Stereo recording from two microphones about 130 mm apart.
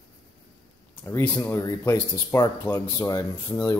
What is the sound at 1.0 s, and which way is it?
Speech, 20° left (ahead or behind).